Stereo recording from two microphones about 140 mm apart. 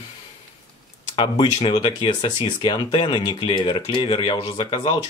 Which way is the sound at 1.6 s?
35° left (ahead or behind).